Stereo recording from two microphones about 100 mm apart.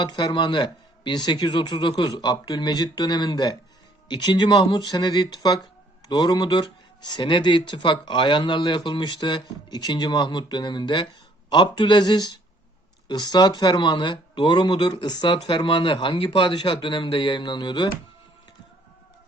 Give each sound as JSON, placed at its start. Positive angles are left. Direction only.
{"t": 0.0, "sound": "speech", "side_deg": 45}